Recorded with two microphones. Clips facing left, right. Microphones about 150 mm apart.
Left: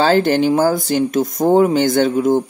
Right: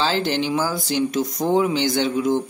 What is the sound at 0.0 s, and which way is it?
Speech, 50° left (ahead or behind).